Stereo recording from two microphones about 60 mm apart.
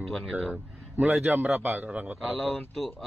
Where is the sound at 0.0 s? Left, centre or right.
Centre.